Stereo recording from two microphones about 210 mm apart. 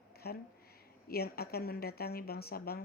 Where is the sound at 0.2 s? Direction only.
50° left (ahead or behind).